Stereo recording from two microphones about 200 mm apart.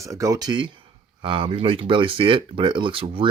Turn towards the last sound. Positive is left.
turn(degrees=-25)  # may be behind; listen again after turning